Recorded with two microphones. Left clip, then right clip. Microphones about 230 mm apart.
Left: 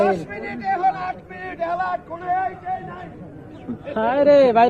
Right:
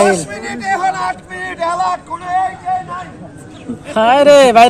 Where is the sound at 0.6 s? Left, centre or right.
Centre.